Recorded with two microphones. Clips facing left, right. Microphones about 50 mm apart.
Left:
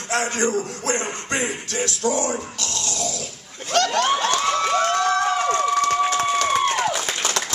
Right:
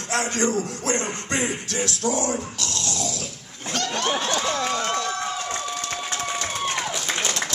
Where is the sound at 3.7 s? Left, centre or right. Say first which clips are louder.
Left 8 dB; left.